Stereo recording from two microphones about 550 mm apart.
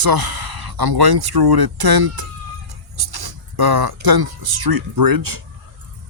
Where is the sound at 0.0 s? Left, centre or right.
Right.